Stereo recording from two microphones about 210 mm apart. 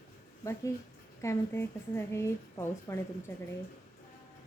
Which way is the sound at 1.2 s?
10° left (ahead or behind).